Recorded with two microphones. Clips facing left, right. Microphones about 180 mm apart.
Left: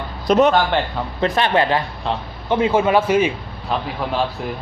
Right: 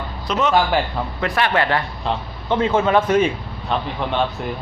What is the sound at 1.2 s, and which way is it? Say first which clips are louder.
Speech: left 3 dB; 20° left (ahead or behind).